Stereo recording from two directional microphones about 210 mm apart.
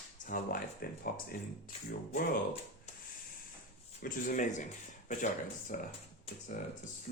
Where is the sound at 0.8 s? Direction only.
45° left (ahead or behind).